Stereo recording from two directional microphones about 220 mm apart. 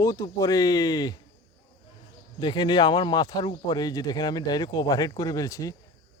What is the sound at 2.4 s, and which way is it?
Speech, 20° left (ahead or behind).